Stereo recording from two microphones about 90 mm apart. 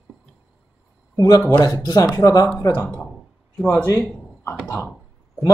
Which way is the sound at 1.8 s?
40° left (ahead or behind).